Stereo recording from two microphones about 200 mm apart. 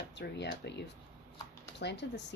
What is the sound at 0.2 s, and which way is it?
Speech, 60° left (ahead or behind).